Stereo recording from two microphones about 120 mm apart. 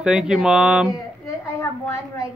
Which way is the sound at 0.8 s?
25° left (ahead or behind).